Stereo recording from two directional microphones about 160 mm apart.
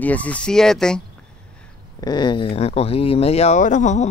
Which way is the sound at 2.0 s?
25° left (ahead or behind).